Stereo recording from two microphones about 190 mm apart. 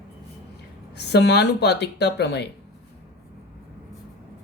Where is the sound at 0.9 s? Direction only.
60° left (ahead or behind).